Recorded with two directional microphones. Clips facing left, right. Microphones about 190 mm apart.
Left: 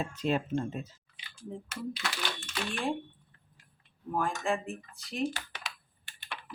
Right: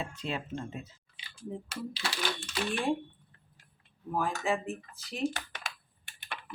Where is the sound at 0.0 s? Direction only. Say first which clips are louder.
Left 6 dB; 40° left (ahead or behind).